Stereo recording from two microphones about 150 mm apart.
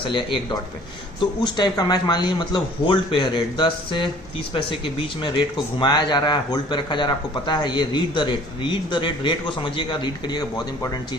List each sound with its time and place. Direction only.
0.0 s a man's voice: 35° left (ahead or behind)